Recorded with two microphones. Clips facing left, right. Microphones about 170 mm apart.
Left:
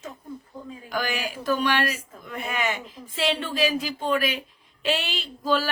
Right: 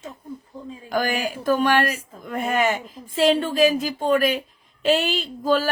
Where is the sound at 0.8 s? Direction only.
45° right (ahead or behind).